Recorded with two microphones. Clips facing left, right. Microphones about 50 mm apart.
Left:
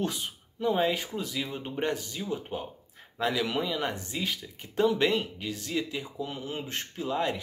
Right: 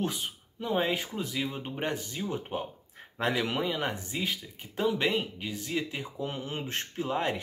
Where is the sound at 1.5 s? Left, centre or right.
Centre.